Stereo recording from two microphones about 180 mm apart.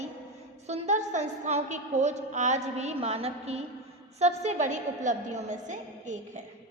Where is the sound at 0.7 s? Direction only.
40° right (ahead or behind).